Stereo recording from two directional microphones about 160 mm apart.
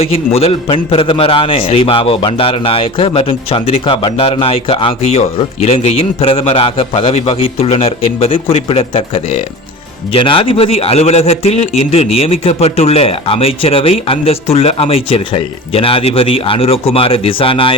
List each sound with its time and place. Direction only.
0.0 s a man's voice: 40° left (ahead or behind)